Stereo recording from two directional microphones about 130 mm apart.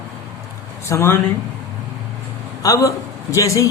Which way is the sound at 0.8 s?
20° left (ahead or behind).